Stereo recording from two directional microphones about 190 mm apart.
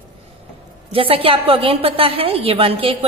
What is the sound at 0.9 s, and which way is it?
A woman's voice, 30° right (ahead or behind).